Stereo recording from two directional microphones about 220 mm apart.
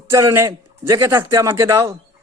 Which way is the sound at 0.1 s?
15° right (ahead or behind).